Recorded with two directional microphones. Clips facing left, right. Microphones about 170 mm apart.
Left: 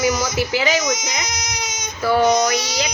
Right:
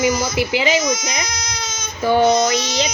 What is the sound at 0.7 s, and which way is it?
Speech, 20° left (ahead or behind).